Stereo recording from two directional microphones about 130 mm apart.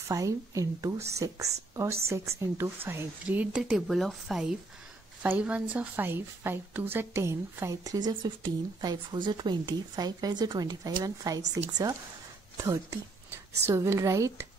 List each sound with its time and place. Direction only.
0.1 s a woman's voice: 25° right (ahead or behind)